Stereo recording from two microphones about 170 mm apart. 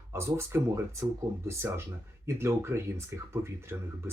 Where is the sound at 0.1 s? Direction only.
15° right (ahead or behind).